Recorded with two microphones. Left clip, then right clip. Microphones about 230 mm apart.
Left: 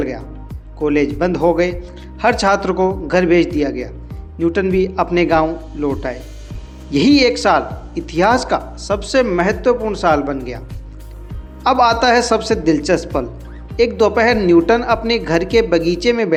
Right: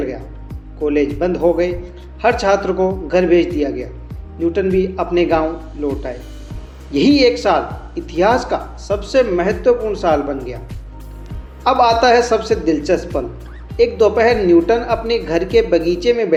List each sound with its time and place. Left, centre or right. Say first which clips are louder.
0.8 s speech: left 1 dB; left
11.6 s speech: right 1 dB; left